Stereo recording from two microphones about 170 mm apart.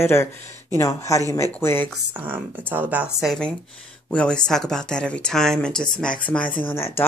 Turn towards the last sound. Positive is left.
turn(degrees=15)  # may be behind; listen again after turning